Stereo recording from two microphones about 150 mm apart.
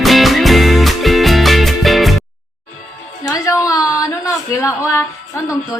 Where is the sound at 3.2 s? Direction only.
20° left (ahead or behind).